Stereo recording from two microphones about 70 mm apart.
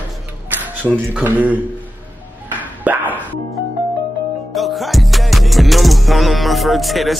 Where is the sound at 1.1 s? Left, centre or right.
Right.